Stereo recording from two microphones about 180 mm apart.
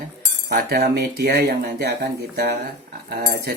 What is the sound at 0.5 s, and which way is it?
Speech, 60° right (ahead or behind).